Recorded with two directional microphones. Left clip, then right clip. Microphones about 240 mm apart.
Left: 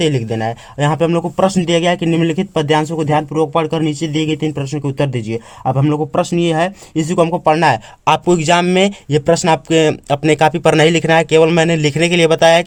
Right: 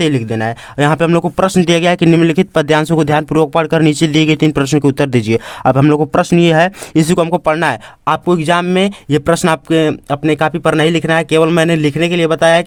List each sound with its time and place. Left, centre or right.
0.0 s speech: right
8.0 s speech: centre; by 9.6 s right
9.6 s speech: centre